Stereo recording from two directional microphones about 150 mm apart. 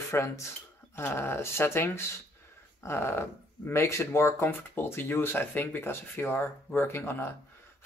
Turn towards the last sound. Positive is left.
turn(degrees=15)  # may be behind; listen again after turning